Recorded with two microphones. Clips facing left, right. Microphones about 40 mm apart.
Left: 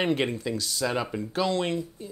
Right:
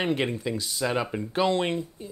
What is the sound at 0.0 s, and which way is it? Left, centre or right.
Speech, centre.